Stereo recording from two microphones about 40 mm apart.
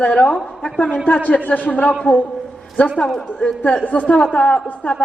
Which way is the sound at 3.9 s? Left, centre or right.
Left.